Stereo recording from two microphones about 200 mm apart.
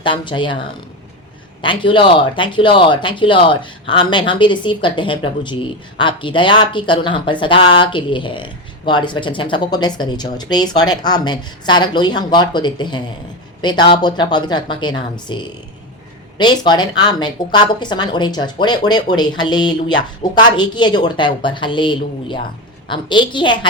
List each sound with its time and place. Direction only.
0.0 s speech: 25° left (ahead or behind)
1.6 s speech: 25° left (ahead or behind)